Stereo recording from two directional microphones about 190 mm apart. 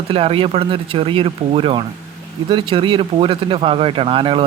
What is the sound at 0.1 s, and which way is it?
Speech, 30° right (ahead or behind).